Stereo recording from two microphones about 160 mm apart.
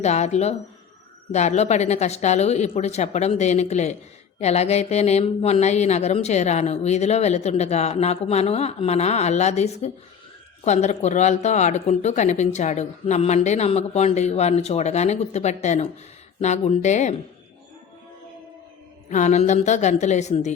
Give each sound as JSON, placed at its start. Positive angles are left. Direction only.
{"t": 0.0, "sound": "speech", "side_deg": 45}
{"t": 19.0, "sound": "speech", "side_deg": 50}